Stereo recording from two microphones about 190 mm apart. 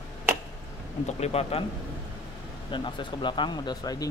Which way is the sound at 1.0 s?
35° left (ahead or behind).